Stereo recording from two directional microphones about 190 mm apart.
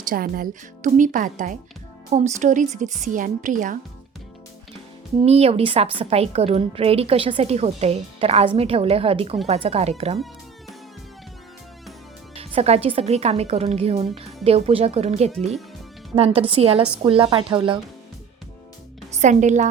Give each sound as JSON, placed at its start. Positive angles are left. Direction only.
{"t": 0.1, "sound": "a woman's voice", "side_deg": -50}
{"t": 5.2, "sound": "a woman's voice", "side_deg": -30}
{"t": 12.3, "sound": "a woman's voice", "side_deg": -30}
{"t": 19.2, "sound": "a woman's voice", "side_deg": -40}